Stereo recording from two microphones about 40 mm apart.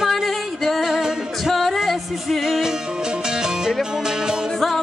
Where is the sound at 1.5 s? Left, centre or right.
Centre.